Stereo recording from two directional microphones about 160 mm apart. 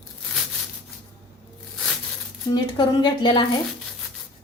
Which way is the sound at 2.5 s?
30° left (ahead or behind).